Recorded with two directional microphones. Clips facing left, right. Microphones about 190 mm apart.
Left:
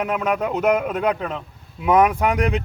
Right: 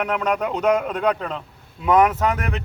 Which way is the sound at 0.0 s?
10° left (ahead or behind).